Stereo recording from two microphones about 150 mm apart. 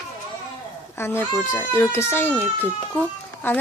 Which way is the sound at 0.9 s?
15° left (ahead or behind).